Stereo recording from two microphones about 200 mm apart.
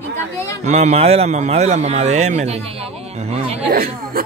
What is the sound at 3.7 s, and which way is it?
Speech, 45° right (ahead or behind).